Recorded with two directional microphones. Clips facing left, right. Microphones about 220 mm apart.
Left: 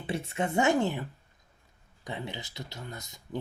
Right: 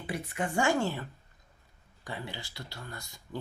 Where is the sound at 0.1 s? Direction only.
25° left (ahead or behind).